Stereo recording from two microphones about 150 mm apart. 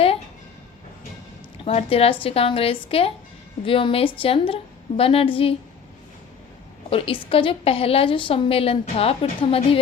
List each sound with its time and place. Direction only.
1.6 s a woman's voice: 40° left (ahead or behind)
6.9 s a woman's voice: 40° left (ahead or behind)